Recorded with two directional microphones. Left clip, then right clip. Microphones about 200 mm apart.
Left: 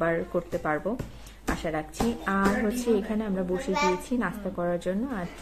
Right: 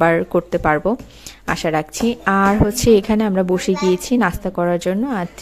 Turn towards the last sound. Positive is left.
turn(degrees=-50)  # may be behind; listen again after turning